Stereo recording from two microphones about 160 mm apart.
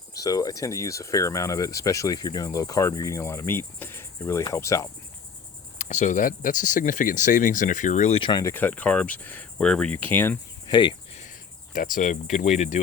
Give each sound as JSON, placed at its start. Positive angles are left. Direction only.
{"t": 0.2, "sound": "speech", "side_deg": 20}
{"t": 5.8, "sound": "speech", "side_deg": 50}
{"t": 8.2, "sound": "cricket", "side_deg": 25}
{"t": 10.7, "sound": "speech", "side_deg": 30}
{"t": 11.1, "sound": "speech", "side_deg": 50}